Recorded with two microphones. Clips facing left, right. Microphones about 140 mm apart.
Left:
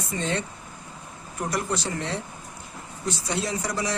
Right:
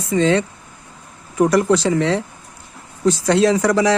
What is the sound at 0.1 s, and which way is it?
Speech, 90° right.